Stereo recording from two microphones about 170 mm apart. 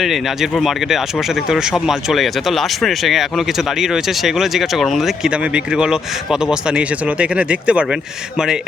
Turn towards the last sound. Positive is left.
turn(degrees=-5)  # may be behind; listen again after turning